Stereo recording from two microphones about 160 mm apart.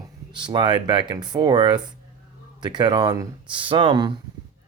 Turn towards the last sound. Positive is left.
turn(degrees=-30)  # may be behind; listen again after turning